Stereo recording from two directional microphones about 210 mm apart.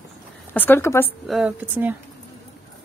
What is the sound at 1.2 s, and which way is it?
Speech, 5° right (ahead or behind).